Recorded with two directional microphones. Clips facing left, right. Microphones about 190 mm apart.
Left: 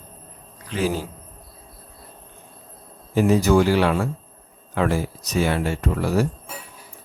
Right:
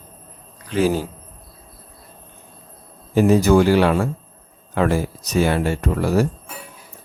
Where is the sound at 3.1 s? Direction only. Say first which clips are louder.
Right 3 dB; 50° right (ahead or behind).